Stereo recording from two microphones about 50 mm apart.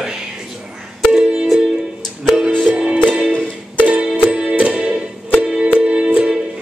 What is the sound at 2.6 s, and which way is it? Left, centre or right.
Music, centre.